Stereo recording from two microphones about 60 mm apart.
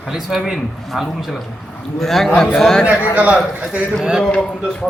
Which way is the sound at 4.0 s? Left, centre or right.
Centre.